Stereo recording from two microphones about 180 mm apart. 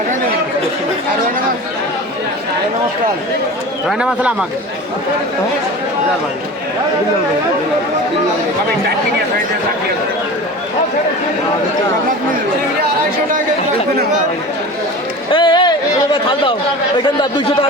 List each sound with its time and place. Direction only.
3.8 s speech: 5° right (ahead or behind)
15.3 s speech: 25° left (ahead or behind)
17.2 s speech: 25° left (ahead or behind)